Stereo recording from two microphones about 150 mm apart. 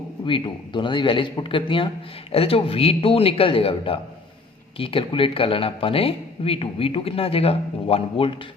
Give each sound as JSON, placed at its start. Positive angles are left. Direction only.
{"t": 0.3, "sound": "speech", "side_deg": 35}